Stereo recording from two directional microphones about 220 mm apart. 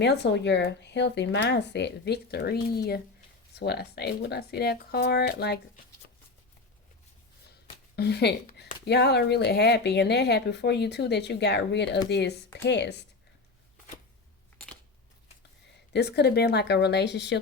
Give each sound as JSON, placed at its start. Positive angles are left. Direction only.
{"t": 0.0, "sound": "speech", "side_deg": 50}
{"t": 7.9, "sound": "speech", "side_deg": 50}
{"t": 15.9, "sound": "speech", "side_deg": 50}